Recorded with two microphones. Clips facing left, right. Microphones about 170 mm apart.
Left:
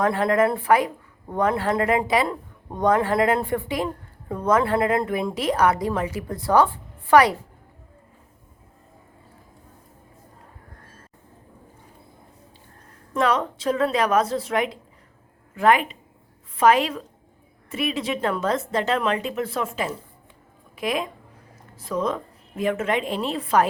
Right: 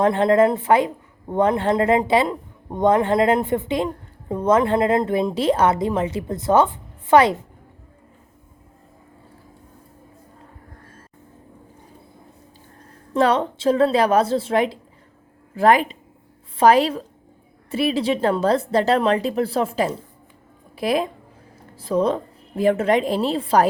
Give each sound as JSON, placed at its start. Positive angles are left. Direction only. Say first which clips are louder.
{"t": 0.0, "sound": "speech", "louder": "right 4 dB", "side_deg": -25}
{"t": 13.1, "sound": "a woman's voice", "louder": "right 4 dB", "side_deg": -30}